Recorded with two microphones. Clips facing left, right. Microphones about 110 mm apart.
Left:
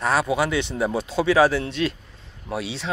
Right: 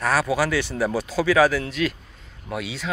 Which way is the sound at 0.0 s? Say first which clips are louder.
Even; 25° left (ahead or behind).